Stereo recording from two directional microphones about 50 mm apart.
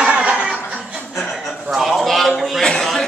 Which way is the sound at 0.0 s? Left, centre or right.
Right.